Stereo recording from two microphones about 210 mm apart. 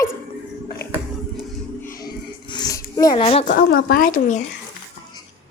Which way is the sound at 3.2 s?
35° left (ahead or behind).